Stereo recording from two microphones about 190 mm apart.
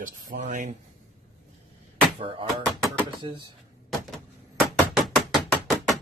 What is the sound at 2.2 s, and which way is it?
Speech, 25° right (ahead or behind).